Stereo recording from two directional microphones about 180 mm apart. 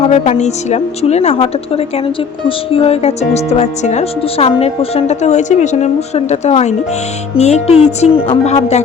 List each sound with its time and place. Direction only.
0.0 s speech: 40° left (ahead or behind)